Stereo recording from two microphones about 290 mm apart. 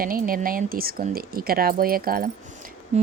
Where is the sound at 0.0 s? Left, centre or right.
Right.